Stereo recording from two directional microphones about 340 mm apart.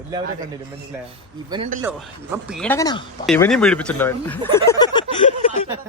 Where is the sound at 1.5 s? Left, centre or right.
Centre.